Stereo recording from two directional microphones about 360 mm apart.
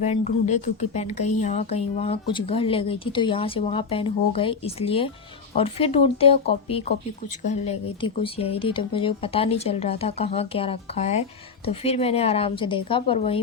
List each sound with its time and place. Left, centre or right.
0.0 s speech: centre